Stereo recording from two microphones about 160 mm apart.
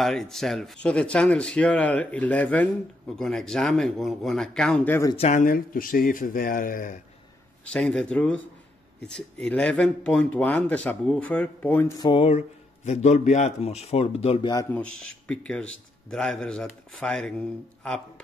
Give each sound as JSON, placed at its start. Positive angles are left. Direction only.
{"t": 0.0, "sound": "a man's voice", "side_deg": 0}
{"t": 5.1, "sound": "speech", "side_deg": 40}
{"t": 5.4, "sound": "speech", "side_deg": 60}
{"t": 7.6, "sound": "speech", "side_deg": 5}
{"t": 12.1, "sound": "speech", "side_deg": 40}
{"t": 14.7, "sound": "a man's voice", "side_deg": 10}